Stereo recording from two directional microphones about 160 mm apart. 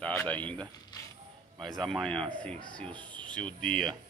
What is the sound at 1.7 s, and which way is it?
Speech, centre (ahead or behind).